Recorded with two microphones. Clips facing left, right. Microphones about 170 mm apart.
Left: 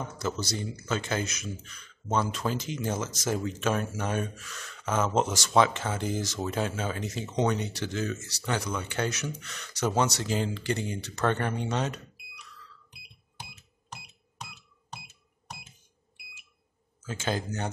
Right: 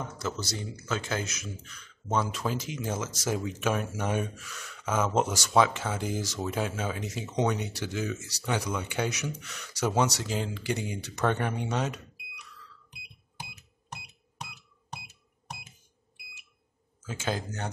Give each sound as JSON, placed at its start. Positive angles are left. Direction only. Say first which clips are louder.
{"t": 0.2, "sound": "speech", "louder": "left 4 dB", "side_deg": 0}
{"t": 17.0, "sound": "speech", "louder": "left 1 dB", "side_deg": -5}